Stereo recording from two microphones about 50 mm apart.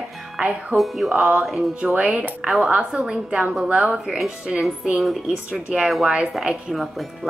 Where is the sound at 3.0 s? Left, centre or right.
Centre.